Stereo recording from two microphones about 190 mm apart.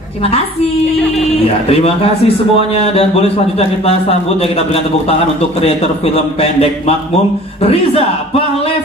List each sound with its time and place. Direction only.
1.7 s a man's voice: 30° left (ahead or behind)